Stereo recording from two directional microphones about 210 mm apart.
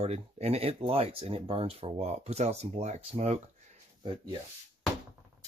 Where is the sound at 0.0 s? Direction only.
30° right (ahead or behind).